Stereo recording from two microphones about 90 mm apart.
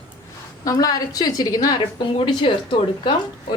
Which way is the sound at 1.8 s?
75° left (ahead or behind).